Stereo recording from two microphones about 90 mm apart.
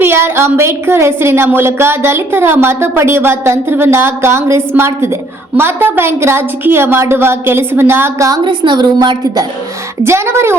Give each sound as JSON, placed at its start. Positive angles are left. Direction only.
{"t": 0.0, "sound": "a woman's voice", "side_deg": -25}
{"t": 8.4, "sound": "a woman's voice", "side_deg": -55}
{"t": 10.0, "sound": "a woman's voice", "side_deg": -30}